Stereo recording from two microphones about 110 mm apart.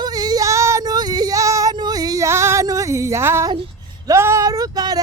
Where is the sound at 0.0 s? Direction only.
35° right (ahead or behind).